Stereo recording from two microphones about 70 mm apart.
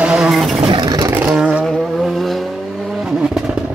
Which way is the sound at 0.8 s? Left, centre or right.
Right.